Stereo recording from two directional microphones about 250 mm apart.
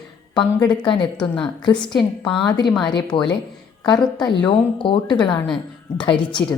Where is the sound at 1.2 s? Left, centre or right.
Centre.